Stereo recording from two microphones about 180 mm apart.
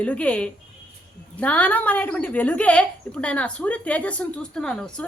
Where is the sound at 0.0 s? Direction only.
5° left (ahead or behind).